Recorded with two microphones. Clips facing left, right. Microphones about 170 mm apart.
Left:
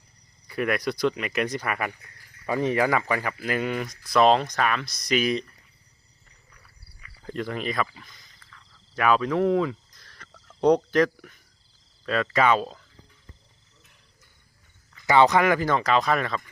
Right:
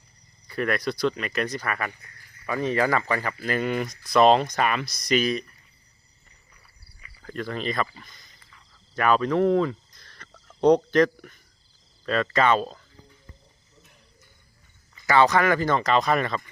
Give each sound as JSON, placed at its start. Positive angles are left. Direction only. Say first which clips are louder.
{"t": 0.4, "sound": "speech", "louder": "even", "side_deg": 10}
{"t": 5.2, "sound": "speech", "louder": "left 1 dB", "side_deg": 20}
{"t": 7.3, "sound": "speech", "louder": "even", "side_deg": 15}
{"t": 8.4, "sound": "a sound", "louder": "left 2 dB", "side_deg": -15}
{"t": 9.0, "sound": "speech", "louder": "right 1 dB", "side_deg": 5}
{"t": 15.0, "sound": "speech", "louder": "left 1 dB", "side_deg": 20}